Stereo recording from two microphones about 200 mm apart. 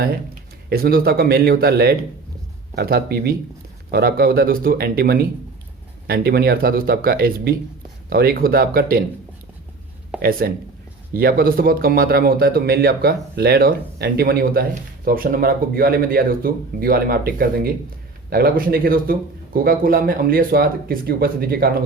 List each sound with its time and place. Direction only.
0.7 s speech: 50° right (ahead or behind)
10.2 s speech: 50° right (ahead or behind)